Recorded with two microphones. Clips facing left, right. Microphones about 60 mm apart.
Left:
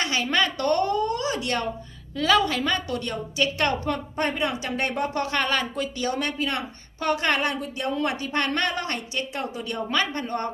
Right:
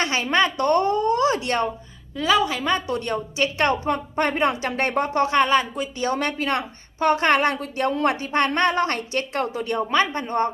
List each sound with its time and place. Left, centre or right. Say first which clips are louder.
0.0 s speech: right 3 dB; right
2.1 s a woman's voice: right 1 dB; centre
2.7 s a woman's voice: right 4 dB; right
6.0 s a woman's voice: right 4 dB; right
9.1 s a woman's voice: right 4 dB; right
9.5 s a woman's voice: right 5 dB; right